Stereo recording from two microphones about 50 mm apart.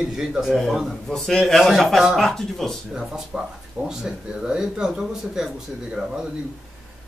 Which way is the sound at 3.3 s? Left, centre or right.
Right.